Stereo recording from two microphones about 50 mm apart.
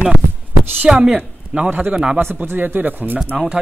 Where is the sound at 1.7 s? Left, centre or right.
Right.